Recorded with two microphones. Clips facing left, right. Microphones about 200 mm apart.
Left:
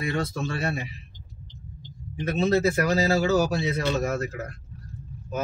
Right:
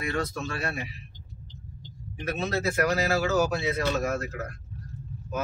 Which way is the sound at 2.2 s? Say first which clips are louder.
Left 6 dB; 25° left (ahead or behind).